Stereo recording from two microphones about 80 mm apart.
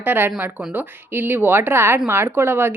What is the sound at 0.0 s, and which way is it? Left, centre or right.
A woman's voice, right.